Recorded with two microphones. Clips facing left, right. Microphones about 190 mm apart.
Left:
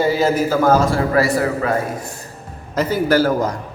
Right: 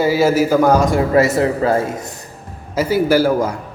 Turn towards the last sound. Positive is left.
turn(degrees=-10)  # may be behind; listen again after turning